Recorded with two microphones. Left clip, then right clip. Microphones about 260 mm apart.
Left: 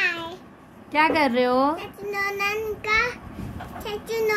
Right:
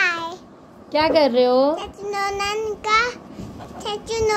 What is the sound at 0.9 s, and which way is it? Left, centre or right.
A child's voice, centre.